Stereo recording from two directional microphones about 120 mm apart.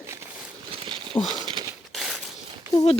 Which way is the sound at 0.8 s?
45° right (ahead or behind).